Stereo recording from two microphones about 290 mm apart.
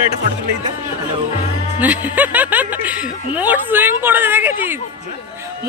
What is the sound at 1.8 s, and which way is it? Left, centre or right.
Speech, centre.